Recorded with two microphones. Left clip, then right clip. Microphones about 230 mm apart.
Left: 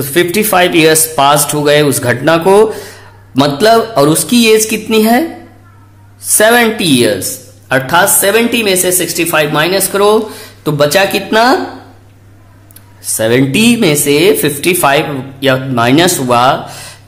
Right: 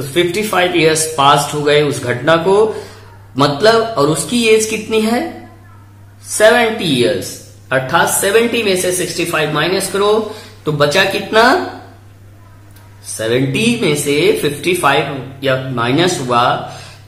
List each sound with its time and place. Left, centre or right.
0.1 s speech: left
6.3 s speech: left
13.1 s speech: left